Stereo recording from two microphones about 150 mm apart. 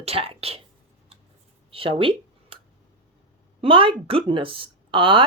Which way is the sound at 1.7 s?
35° right (ahead or behind).